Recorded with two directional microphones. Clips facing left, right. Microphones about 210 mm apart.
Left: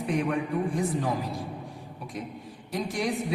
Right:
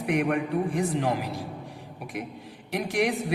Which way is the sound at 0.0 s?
65° right (ahead or behind).